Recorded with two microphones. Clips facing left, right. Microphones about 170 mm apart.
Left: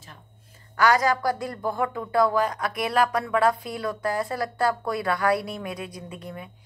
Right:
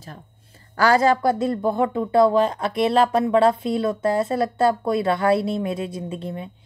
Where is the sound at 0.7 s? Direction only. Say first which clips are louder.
Right 4 dB; 30° right (ahead or behind).